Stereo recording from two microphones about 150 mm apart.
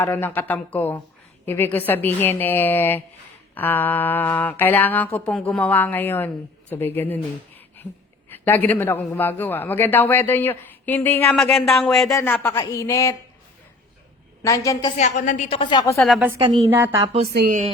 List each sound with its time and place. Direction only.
0.0 s a woman's voice: 15° left (ahead or behind)
11.5 s speech: centre (ahead or behind)
12.1 s speech: 15° left (ahead or behind)
14.4 s speech: 20° left (ahead or behind)
14.9 s a woman's voice: 55° left (ahead or behind)
15.4 s a woman's voice: 35° left (ahead or behind)
16.0 s speech: centre (ahead or behind)
16.6 s a woman's voice: 15° right (ahead or behind)
17.3 s speech: 75° right (ahead or behind)